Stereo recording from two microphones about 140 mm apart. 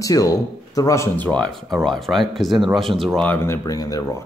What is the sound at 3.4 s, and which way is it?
Speech, 20° left (ahead or behind).